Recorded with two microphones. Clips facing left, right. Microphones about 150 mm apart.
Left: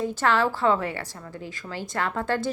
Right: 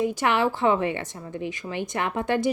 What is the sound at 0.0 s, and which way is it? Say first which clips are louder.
A woman's voice: right 1 dB; 15° right (ahead or behind).